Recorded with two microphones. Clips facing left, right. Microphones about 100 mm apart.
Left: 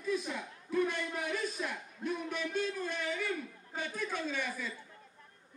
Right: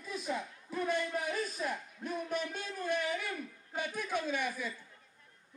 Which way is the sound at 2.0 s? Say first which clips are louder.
Even; 50° right (ahead or behind).